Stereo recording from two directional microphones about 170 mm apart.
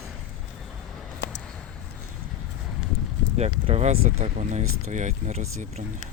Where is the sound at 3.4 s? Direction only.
35° right (ahead or behind).